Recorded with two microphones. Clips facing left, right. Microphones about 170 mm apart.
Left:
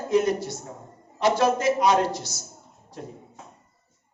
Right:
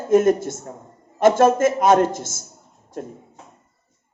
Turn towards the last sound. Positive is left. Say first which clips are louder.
# right 6 dB
turn(degrees=-50)  # may be behind; listen again after turning